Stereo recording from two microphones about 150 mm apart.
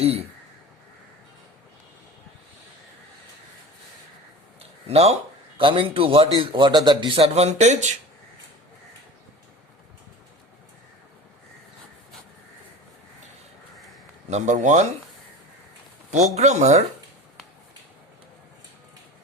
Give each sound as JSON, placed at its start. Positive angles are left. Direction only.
{"t": 0.0, "sound": "speech", "side_deg": -45}
{"t": 4.9, "sound": "a man's voice", "side_deg": -45}
{"t": 14.3, "sound": "speech", "side_deg": -50}
{"t": 16.1, "sound": "speech", "side_deg": -50}